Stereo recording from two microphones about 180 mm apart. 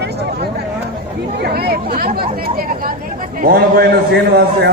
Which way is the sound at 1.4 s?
60° right (ahead or behind).